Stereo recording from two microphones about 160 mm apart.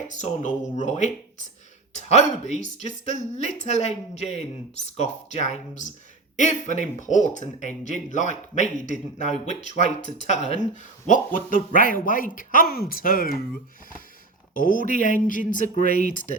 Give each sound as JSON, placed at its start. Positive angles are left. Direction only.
{"t": 0.1, "sound": "a woman's voice", "side_deg": 50}
{"t": 14.5, "sound": "speech", "side_deg": 60}